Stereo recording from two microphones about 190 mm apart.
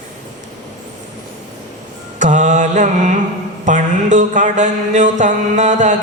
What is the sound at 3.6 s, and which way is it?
A man's voice, 40° right (ahead or behind).